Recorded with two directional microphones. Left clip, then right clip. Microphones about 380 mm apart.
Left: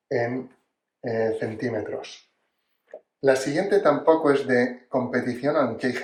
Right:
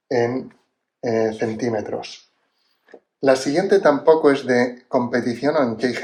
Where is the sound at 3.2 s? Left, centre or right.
Centre.